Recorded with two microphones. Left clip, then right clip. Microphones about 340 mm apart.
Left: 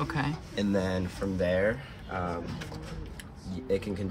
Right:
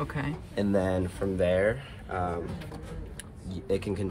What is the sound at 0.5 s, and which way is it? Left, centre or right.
Speech, centre.